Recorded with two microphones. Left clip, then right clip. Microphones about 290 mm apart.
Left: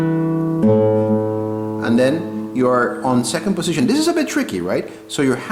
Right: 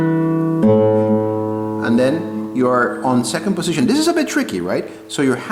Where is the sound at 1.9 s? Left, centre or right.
Centre.